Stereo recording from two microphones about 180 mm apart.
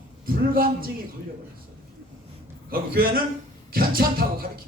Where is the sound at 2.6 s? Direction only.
55° right (ahead or behind).